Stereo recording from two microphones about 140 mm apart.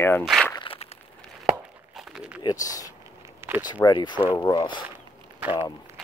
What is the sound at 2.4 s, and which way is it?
Speech, 25° left (ahead or behind).